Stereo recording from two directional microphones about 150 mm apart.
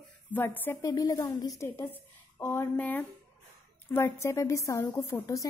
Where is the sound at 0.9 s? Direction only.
25° left (ahead or behind).